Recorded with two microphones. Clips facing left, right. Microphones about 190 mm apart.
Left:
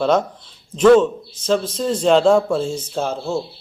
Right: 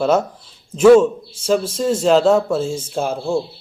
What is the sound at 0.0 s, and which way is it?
A man's voice, 5° right (ahead or behind).